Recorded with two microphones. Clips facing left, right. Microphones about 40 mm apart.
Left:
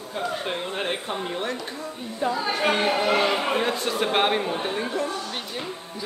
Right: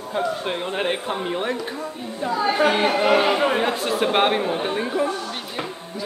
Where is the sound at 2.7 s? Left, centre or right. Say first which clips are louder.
Right 3 dB; centre.